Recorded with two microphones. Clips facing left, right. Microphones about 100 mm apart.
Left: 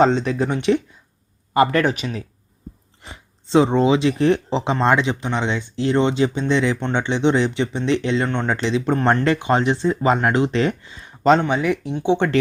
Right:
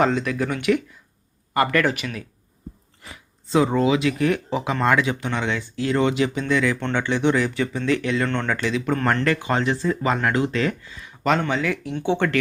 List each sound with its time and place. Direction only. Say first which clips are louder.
0.0 s speech: left 4 dB; 30° left (ahead or behind)
11.4 s speech: left 4 dB; 20° left (ahead or behind)